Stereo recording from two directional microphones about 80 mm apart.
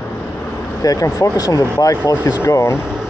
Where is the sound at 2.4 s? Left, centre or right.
Left.